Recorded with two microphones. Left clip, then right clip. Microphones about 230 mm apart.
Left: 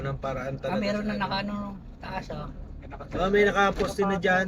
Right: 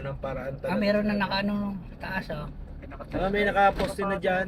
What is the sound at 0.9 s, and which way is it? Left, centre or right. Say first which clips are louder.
A man's voice: right 3 dB; right.